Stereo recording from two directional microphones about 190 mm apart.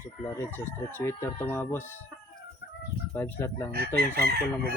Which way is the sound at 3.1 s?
10° left (ahead or behind).